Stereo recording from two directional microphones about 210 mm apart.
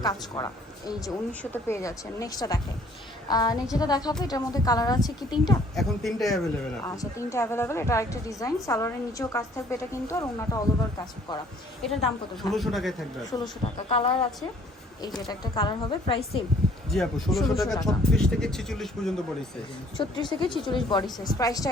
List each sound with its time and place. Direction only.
0.0 s a woman's voice: 20° left (ahead or behind)
5.7 s speech: centre (ahead or behind)
6.8 s a woman's voice: 15° left (ahead or behind)
11.8 s speech: centre (ahead or behind)
13.3 s a woman's voice: 25° left (ahead or behind)
15.3 s a woman's voice: 20° left (ahead or behind)
16.9 s speech: centre (ahead or behind)
20.0 s a woman's voice: 20° left (ahead or behind)